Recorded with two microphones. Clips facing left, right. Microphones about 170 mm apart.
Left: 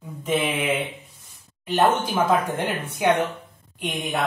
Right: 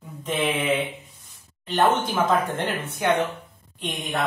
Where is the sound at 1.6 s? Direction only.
10° left (ahead or behind).